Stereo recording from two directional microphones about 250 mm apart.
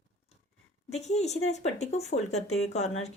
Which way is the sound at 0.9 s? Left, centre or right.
Left.